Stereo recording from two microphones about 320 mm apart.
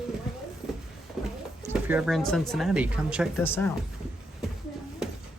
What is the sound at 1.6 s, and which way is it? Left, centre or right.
Speech, centre.